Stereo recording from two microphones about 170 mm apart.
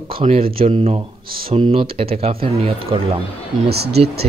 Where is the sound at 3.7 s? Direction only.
70° right (ahead or behind).